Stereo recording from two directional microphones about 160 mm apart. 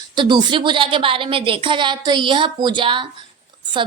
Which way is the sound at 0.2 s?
25° right (ahead or behind).